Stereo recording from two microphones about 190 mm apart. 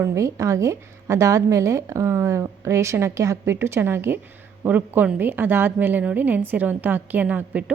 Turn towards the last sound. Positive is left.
turn(degrees=-5)  # may be behind; listen again after turning